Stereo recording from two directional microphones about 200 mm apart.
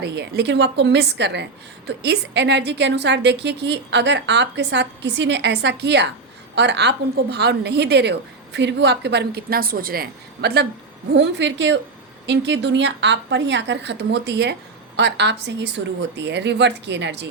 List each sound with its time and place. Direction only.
0.0 s a woman's voice: 55° right (ahead or behind)